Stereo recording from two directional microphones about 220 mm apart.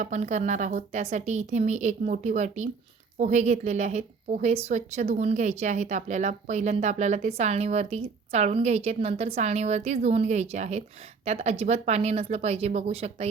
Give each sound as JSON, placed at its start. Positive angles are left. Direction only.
{"t": 0.0, "sound": "a woman's voice", "side_deg": -30}